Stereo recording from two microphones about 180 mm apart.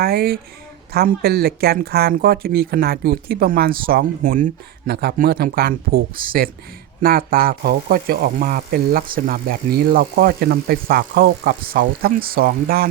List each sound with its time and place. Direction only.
0.0 s speech: 60° right (ahead or behind)